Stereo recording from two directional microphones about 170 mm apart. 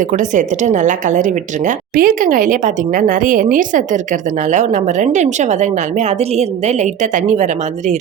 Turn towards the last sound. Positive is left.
turn(degrees=-45)  # may be behind; listen again after turning